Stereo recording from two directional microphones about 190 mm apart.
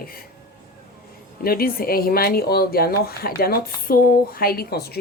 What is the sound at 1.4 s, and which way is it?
Speech, 50° left (ahead or behind).